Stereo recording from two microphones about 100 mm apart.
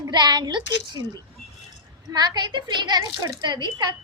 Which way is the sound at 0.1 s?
45° right (ahead or behind).